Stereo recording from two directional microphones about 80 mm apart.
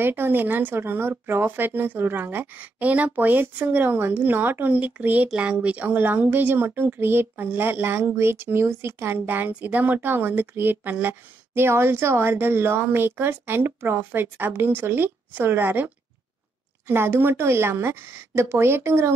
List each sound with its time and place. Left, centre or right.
0.0 s a woman's voice: right